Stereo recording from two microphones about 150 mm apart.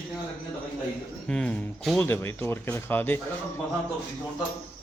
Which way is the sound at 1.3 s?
5° left (ahead or behind).